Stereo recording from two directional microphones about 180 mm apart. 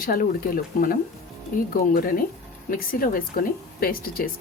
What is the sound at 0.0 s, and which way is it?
Speech, 55° left (ahead or behind).